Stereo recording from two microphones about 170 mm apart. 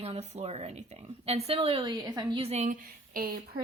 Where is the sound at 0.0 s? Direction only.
35° right (ahead or behind).